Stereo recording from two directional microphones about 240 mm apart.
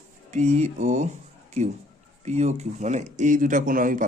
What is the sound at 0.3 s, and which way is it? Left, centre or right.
Speech, right.